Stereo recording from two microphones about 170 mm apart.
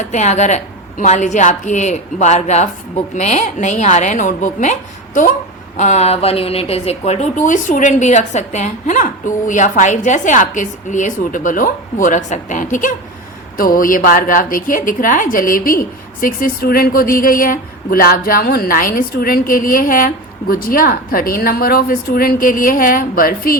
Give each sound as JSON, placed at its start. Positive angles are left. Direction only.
{"t": 0.0, "sound": "a woman's voice", "side_deg": 45}